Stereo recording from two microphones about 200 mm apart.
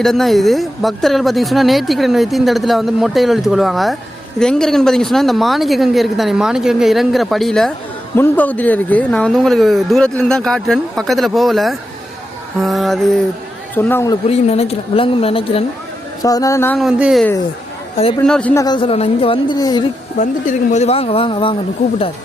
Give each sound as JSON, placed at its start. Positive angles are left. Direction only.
{"t": 0.0, "sound": "speech", "side_deg": 0}
{"t": 14.3, "sound": "speech", "side_deg": 30}
{"t": 16.2, "sound": "speech", "side_deg": 15}
{"t": 16.7, "sound": "speech", "side_deg": 0}
{"t": 18.3, "sound": "speech", "side_deg": 5}
{"t": 18.6, "sound": "speech", "side_deg": 25}
{"t": 20.1, "sound": "speech", "side_deg": 40}